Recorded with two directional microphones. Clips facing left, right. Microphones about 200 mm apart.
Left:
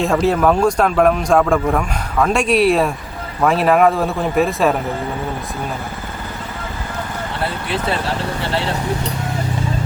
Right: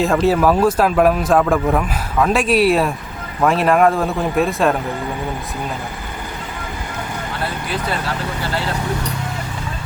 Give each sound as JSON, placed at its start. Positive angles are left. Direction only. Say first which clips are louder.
{"t": 0.0, "sound": "a man's voice", "louder": "even", "side_deg": 0}
{"t": 7.7, "sound": "speech", "louder": "left 3 dB", "side_deg": 25}